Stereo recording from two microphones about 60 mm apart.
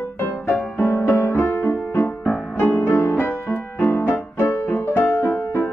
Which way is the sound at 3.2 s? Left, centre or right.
Left.